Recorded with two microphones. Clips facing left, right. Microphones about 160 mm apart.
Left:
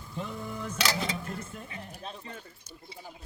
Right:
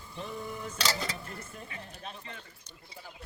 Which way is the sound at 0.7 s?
10° left (ahead or behind).